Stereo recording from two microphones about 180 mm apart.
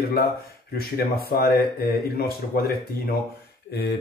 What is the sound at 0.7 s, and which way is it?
Speech, 60° left (ahead or behind).